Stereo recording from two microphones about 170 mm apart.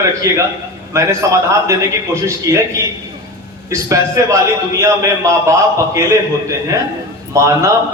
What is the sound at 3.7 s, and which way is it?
A man's voice, 20° right (ahead or behind).